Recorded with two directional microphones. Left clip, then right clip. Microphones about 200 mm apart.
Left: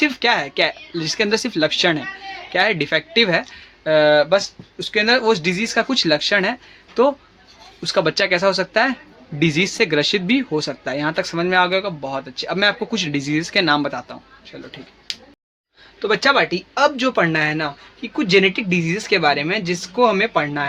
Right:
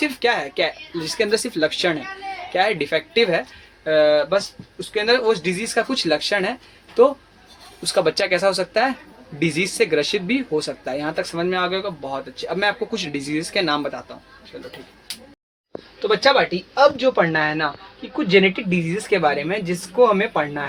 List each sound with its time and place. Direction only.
0.0 s speech: 40° left (ahead or behind)
3.8 s speech: 55° left (ahead or behind); by 14.0 s 40° left (ahead or behind)
16.0 s speech: 50° left (ahead or behind)